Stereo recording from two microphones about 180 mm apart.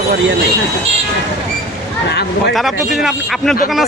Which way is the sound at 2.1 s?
65° left (ahead or behind).